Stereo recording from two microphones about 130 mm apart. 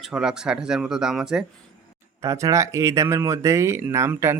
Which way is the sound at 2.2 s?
25° right (ahead or behind).